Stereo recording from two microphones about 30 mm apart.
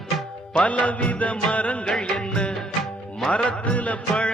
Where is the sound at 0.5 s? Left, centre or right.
Left.